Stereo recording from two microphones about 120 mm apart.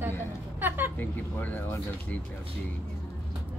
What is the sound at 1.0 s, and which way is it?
Speech, 15° left (ahead or behind).